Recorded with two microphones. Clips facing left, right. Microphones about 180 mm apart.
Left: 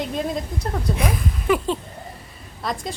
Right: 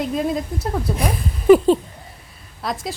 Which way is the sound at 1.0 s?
35° right (ahead or behind).